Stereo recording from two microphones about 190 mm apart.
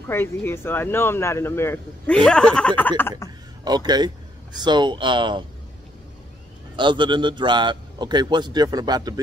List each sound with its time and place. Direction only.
0.1 s speech: 10° left (ahead or behind)
3.6 s a man's voice: 20° right (ahead or behind)
6.8 s a man's voice: 25° right (ahead or behind)